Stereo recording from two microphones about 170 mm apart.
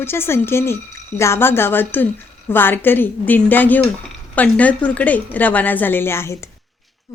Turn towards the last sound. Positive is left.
turn(degrees=15)  # may be behind; listen again after turning